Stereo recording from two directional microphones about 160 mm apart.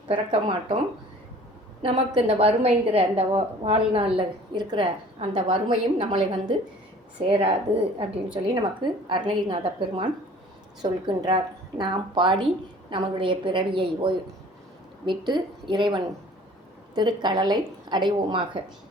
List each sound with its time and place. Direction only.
0.1 s a woman's voice: 35° right (ahead or behind)
1.8 s a woman's voice: 35° right (ahead or behind)